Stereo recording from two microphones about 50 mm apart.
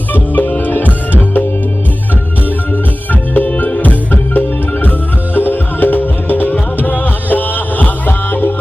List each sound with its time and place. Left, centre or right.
0.1 s music: left
2.7 s music: left